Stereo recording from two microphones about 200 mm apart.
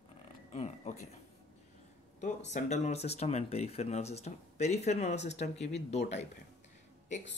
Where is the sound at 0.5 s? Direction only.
35° left (ahead or behind).